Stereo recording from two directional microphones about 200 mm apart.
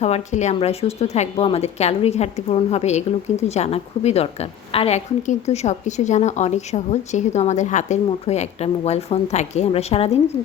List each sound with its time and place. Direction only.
0.0 s a woman's voice: 35° left (ahead or behind)